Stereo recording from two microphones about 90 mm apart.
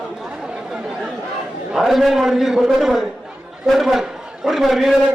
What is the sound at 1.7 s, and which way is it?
A man's voice, 5° right (ahead or behind).